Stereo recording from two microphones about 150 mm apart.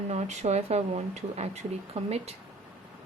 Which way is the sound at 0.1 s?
50° right (ahead or behind).